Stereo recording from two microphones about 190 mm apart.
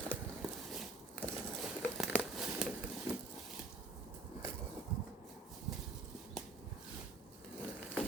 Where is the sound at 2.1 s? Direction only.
Centre (ahead or behind).